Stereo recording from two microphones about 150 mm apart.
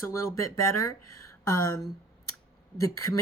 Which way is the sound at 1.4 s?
20° left (ahead or behind).